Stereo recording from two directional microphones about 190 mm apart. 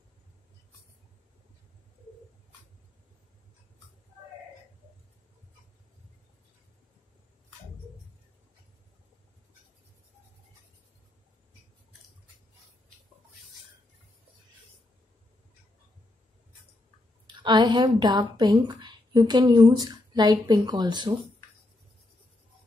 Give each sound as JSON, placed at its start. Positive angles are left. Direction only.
{"t": 17.3, "sound": "a woman's voice", "side_deg": -25}